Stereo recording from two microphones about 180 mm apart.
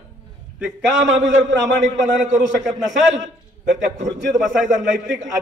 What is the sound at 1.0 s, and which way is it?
Speech, 90° right.